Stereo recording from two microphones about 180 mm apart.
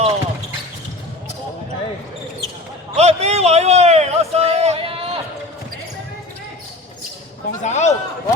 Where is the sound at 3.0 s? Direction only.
35° right (ahead or behind).